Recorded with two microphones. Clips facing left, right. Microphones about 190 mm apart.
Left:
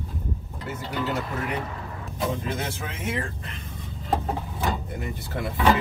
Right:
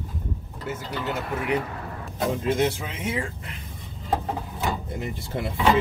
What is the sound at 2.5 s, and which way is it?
Speech, 20° right (ahead or behind).